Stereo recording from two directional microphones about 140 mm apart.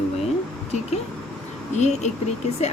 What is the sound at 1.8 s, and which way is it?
Speech, 55° left (ahead or behind).